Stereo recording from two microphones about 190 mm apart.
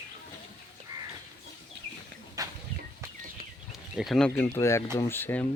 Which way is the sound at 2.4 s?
15° right (ahead or behind).